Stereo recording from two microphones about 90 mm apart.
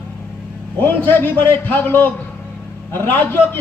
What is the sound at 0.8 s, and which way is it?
A man's voice, 20° left (ahead or behind).